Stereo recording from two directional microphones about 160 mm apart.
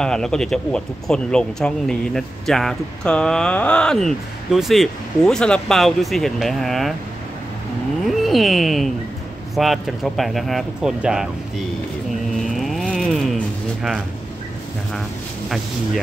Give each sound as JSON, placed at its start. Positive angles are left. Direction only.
{"t": 0.0, "sound": "speech", "side_deg": 5}
{"t": 8.1, "sound": "speech", "side_deg": 0}
{"t": 12.4, "sound": "a sound", "side_deg": 0}